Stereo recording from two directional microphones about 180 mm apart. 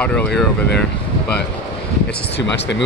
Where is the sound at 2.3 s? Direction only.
75° left (ahead or behind).